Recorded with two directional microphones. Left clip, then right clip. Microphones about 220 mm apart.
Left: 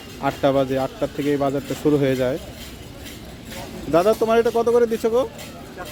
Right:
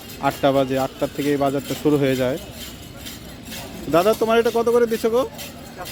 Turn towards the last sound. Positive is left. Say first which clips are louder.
# even
turn(degrees=-10)  # may be behind; listen again after turning